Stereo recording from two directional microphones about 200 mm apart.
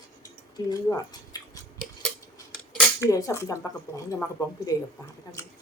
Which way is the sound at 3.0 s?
15° left (ahead or behind).